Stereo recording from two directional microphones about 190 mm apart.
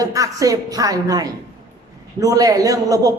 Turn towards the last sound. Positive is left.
turn(degrees=-20)  # may be behind; listen again after turning